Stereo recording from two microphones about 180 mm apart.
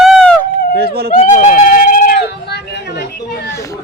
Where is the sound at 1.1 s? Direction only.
45° left (ahead or behind); by 2.6 s 65° left (ahead or behind).